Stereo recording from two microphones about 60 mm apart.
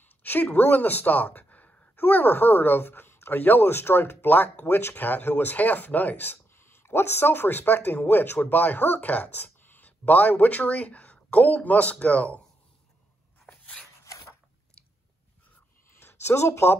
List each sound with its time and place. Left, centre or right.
0.0 s a woman's voice: left
13.5 s dog: centre
15.9 s a sound: left